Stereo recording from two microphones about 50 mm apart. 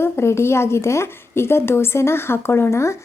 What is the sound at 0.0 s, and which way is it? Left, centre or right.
Speech, left.